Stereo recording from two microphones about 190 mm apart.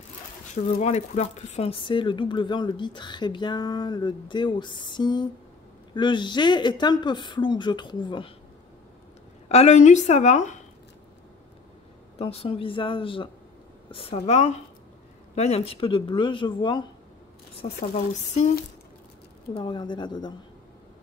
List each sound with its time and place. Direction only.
0.7 s a woman's voice: 35° left (ahead or behind)
9.5 s a woman's voice: 35° left (ahead or behind)
12.2 s a woman's voice: 30° left (ahead or behind)
17.9 s a woman's voice: 35° left (ahead or behind)
19.5 s a woman's voice: 25° left (ahead or behind)